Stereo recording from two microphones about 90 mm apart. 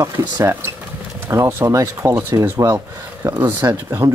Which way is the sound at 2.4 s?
35° right (ahead or behind).